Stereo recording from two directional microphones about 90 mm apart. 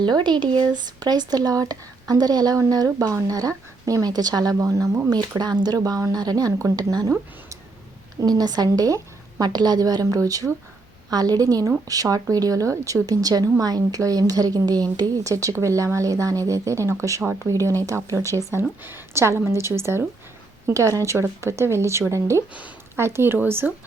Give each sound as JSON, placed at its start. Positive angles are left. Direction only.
{"t": 0.0, "sound": "speech", "side_deg": -55}
{"t": 5.0, "sound": "speech", "side_deg": -50}
{"t": 8.2, "sound": "a woman's voice", "side_deg": -45}